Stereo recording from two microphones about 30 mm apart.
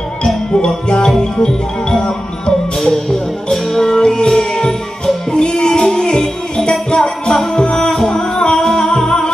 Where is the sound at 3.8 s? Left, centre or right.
Left.